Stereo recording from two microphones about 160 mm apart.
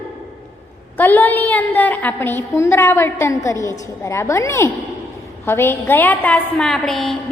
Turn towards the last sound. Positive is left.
turn(degrees=0)  # may be behind; listen again after turning